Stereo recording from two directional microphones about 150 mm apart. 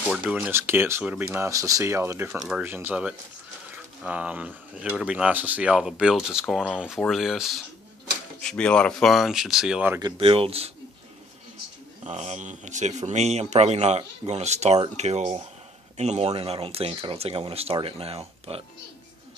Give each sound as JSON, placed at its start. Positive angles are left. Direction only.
{"t": 0.1, "sound": "speech", "side_deg": -5}
{"t": 2.3, "sound": "speech", "side_deg": -5}
{"t": 9.9, "sound": "speech", "side_deg": -30}
{"t": 12.0, "sound": "a man's voice", "side_deg": -50}